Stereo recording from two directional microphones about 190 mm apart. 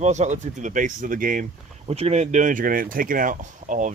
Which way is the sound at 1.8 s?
35° right (ahead or behind).